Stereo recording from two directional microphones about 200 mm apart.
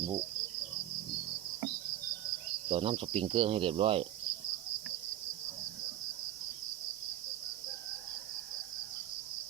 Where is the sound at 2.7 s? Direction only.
25° right (ahead or behind).